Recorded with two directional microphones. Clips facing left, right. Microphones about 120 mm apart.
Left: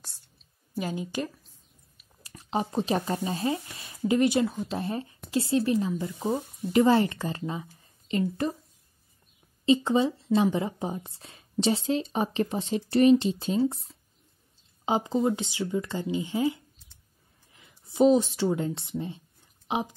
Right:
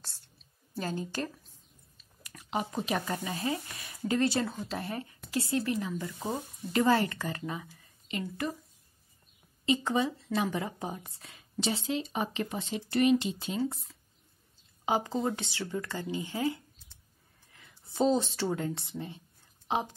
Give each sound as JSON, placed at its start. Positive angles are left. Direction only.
{"t": 0.7, "sound": "a woman's voice", "side_deg": 10}
{"t": 2.2, "sound": "speech", "side_deg": 30}
{"t": 7.6, "sound": "a sound", "side_deg": 30}
{"t": 9.7, "sound": "speech", "side_deg": 25}
{"t": 14.9, "sound": "speech", "side_deg": 20}